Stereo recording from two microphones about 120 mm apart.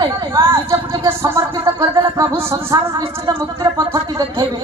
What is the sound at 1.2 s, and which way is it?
Speech, 20° right (ahead or behind).